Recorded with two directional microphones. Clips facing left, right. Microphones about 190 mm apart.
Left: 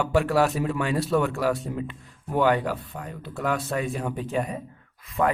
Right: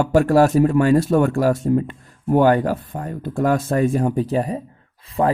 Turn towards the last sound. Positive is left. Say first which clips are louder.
# right 5 dB
turn(degrees=-30)  # may be behind; listen again after turning